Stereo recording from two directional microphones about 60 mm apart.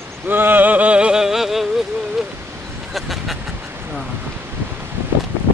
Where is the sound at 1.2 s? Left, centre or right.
Centre.